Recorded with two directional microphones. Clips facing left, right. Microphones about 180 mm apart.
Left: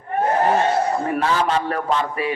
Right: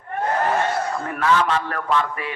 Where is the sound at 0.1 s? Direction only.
25° left (ahead or behind).